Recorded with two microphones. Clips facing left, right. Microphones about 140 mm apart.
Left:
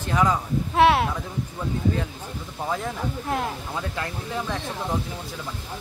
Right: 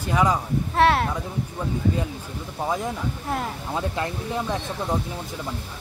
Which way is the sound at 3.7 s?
20° right (ahead or behind).